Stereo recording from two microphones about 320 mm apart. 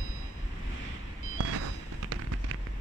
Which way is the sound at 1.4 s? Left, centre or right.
Right.